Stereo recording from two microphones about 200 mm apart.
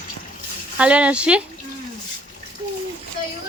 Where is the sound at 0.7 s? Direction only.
5° right (ahead or behind).